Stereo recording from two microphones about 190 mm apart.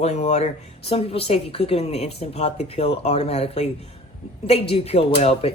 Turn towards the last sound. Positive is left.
turn(degrees=30)  # may be behind; listen again after turning